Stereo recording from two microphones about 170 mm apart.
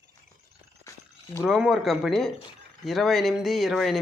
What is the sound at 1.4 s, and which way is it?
Speech, centre (ahead or behind).